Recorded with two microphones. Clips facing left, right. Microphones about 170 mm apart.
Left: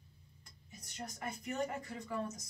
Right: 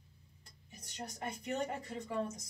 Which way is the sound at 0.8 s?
35° right (ahead or behind).